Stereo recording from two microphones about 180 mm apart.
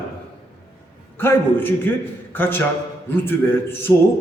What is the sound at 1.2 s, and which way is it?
A man's voice, 10° left (ahead or behind).